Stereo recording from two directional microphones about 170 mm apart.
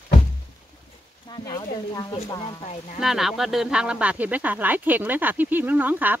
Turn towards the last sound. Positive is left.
turn(degrees=-10)  # may be behind; listen again after turning